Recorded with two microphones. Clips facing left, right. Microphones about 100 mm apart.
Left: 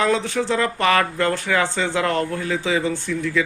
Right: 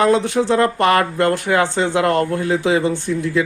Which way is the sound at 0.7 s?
45° right (ahead or behind).